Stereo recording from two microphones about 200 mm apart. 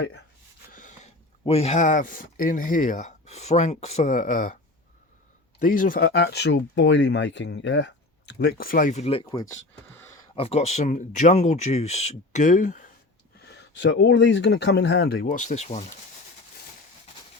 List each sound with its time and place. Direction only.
0.7 s speech: 40° left (ahead or behind)
5.5 s speech: 40° left (ahead or behind); by 9.5 s 25° left (ahead or behind)
9.9 s a sound: 10° left (ahead or behind)
10.3 s speech: 30° left (ahead or behind)
13.6 s speech: 60° left (ahead or behind); by 15.9 s 35° left (ahead or behind)